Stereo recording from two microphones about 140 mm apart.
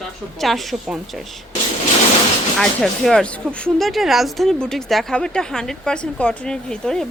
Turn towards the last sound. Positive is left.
turn(degrees=5)  # may be behind; listen again after turning